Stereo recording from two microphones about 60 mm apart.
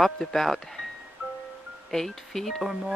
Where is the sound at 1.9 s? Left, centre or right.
Centre.